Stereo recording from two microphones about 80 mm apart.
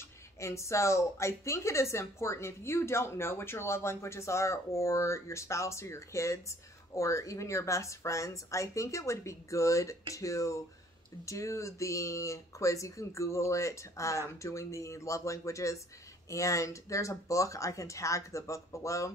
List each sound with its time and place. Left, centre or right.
0.4 s speech: left